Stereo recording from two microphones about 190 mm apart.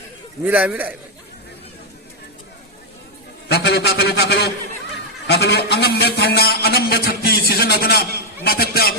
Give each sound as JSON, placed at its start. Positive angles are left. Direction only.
{"t": 0.4, "sound": "a man's voice", "side_deg": -10}
{"t": 3.5, "sound": "a man's voice", "side_deg": 65}